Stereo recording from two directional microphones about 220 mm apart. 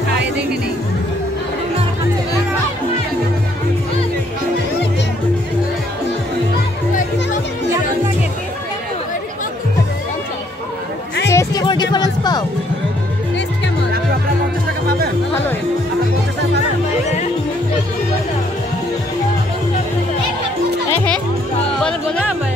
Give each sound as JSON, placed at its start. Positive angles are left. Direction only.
{"t": 11.2, "sound": "music", "side_deg": 15}
{"t": 21.7, "sound": "music", "side_deg": 5}